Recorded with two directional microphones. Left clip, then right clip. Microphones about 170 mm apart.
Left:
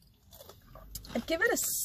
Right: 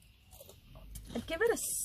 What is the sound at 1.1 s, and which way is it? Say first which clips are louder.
Speech: left 3 dB; 15° left (ahead or behind).